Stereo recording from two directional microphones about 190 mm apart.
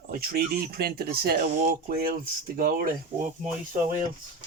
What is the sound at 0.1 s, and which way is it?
Speech, 50° right (ahead or behind).